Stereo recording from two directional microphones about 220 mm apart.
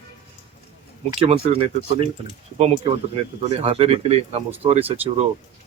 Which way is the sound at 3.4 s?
25° right (ahead or behind).